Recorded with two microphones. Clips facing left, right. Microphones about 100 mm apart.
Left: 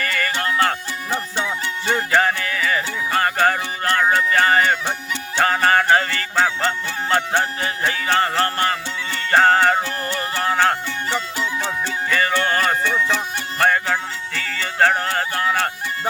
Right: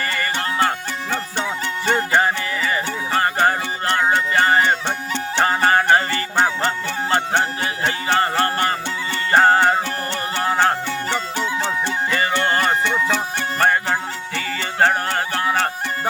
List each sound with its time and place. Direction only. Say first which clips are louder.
0.0 s music: even; 20° right (ahead or behind)
2.1 s music: even; 15° right (ahead or behind)
12.1 s music: left 1 dB; 20° right (ahead or behind)